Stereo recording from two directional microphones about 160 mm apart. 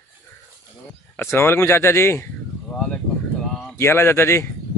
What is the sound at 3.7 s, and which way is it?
Speech, 15° left (ahead or behind).